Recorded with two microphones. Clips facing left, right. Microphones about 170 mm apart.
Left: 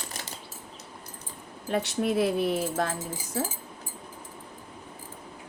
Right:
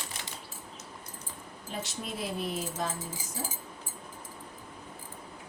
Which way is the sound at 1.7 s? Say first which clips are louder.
Left 12 dB; 65° left (ahead or behind).